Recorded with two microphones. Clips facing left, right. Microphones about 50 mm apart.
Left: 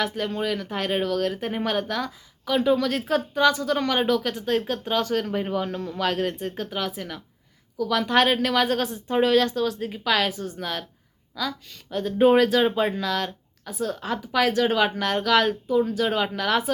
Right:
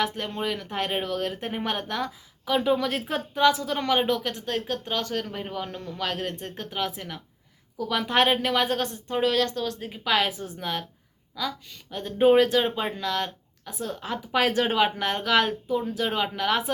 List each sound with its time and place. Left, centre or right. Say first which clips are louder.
0.0 s a woman's voice: left 2 dB; centre
9.8 s a woman's voice: right 2 dB; centre
14.3 s speech: left 2 dB; right
14.7 s speech: left 1 dB; centre